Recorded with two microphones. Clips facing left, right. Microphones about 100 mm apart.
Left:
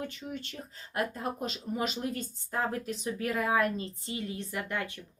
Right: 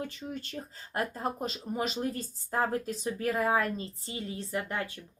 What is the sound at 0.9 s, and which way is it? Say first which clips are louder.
Speech: even; 30° right (ahead or behind).